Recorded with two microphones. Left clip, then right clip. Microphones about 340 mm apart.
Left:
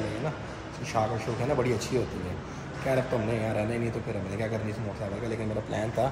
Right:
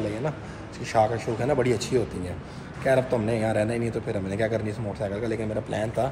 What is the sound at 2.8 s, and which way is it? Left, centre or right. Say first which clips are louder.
A man's voice: right 5 dB; centre.